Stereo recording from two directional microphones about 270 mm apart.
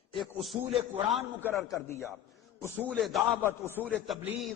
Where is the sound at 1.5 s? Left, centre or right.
Centre.